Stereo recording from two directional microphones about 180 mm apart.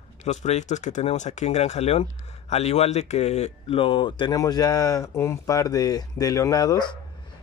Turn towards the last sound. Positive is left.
turn(degrees=25)  # may be behind; listen again after turning